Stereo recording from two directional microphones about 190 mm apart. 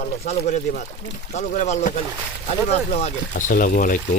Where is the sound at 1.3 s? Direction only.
40° left (ahead or behind).